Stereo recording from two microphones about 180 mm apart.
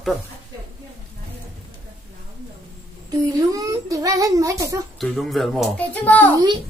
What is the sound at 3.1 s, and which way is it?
A child's voice, 20° right (ahead or behind).